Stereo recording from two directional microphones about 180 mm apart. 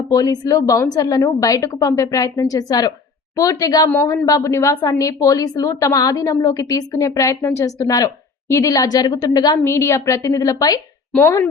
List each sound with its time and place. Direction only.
0.1 s a woman's voice: 20° left (ahead or behind)